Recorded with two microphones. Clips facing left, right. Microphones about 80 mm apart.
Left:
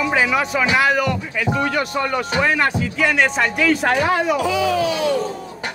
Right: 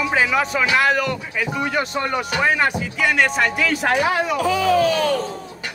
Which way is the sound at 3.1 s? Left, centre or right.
Centre.